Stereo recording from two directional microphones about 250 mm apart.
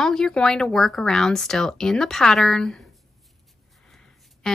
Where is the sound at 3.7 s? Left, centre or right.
Centre.